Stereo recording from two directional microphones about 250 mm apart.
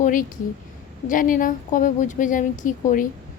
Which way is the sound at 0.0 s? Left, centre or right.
Left.